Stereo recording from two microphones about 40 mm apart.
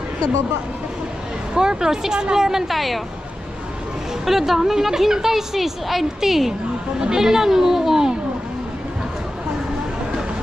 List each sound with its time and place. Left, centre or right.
1.5 s a woman's voice: centre
2.7 s speech: centre
4.3 s a woman's voice: centre